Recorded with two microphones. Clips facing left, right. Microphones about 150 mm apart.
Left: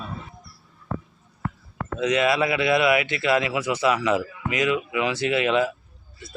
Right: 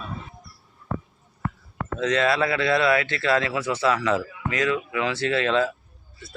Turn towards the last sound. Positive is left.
turn(degrees=15)  # may be behind; listen again after turning